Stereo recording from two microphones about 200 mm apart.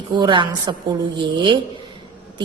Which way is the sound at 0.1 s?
25° right (ahead or behind).